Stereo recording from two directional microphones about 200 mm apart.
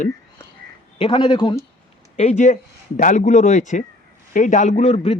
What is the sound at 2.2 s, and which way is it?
A man's voice, 35° left (ahead or behind).